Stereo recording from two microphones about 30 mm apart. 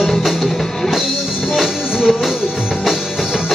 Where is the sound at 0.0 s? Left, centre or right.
Centre.